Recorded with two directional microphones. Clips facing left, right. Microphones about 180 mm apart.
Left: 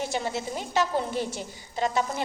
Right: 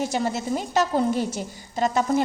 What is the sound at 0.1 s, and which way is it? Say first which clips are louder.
A woman's voice: right 5 dB; 45° right (ahead or behind).